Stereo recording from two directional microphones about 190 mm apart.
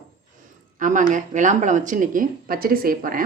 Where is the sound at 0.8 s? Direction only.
40° right (ahead or behind).